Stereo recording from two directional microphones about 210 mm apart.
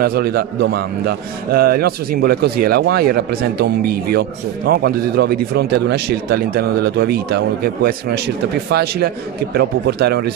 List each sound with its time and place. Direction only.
0.0 s a man's voice: 45° right (ahead or behind)